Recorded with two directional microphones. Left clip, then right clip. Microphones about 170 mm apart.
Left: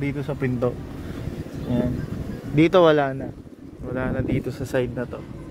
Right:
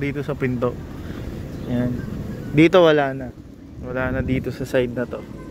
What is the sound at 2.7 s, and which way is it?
Speech, 20° left (ahead or behind).